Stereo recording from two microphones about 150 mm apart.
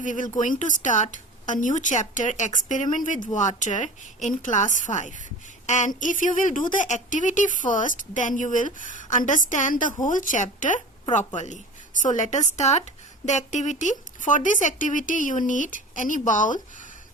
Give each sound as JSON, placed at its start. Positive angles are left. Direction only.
{"t": 0.0, "sound": "speech", "side_deg": 60}